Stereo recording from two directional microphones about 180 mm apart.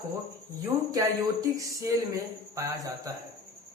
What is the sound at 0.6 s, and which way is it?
Speech, 20° right (ahead or behind).